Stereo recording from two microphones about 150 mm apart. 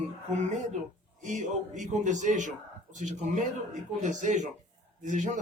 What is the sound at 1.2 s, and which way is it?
A man's voice, 55° right (ahead or behind).